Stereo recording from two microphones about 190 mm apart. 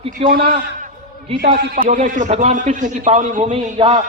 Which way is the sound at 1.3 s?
35° right (ahead or behind).